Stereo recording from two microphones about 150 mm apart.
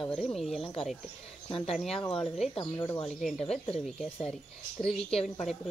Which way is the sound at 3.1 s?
Centre (ahead or behind).